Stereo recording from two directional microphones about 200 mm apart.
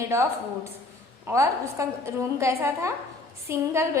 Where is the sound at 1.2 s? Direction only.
15° right (ahead or behind).